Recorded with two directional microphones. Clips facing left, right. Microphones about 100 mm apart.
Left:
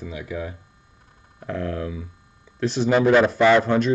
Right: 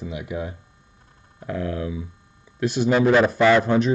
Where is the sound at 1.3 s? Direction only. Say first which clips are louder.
Even; 5° right (ahead or behind).